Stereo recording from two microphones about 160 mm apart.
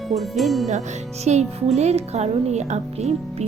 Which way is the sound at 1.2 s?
45° right (ahead or behind).